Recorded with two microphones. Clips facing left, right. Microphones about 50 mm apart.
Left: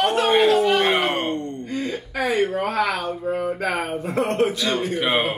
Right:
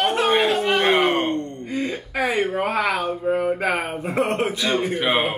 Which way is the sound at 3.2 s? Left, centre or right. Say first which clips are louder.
Right 3 dB; right.